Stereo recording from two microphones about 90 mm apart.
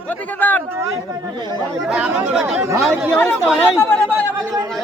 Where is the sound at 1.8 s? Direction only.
10° right (ahead or behind).